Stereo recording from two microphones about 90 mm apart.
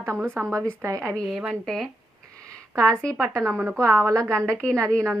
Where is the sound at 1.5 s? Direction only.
5° left (ahead or behind).